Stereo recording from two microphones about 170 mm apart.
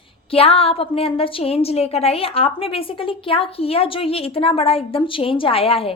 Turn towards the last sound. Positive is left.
turn(degrees=35)  # may be behind; listen again after turning